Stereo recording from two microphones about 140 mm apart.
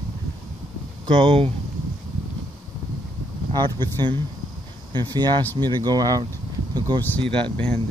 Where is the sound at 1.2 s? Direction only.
40° right (ahead or behind).